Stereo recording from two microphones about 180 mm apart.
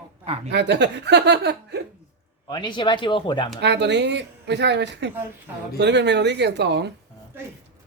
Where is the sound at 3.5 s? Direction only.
70° right (ahead or behind).